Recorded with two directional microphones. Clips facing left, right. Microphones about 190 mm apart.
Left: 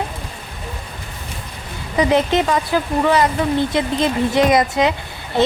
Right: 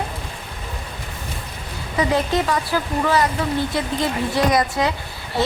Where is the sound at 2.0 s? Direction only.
20° left (ahead or behind).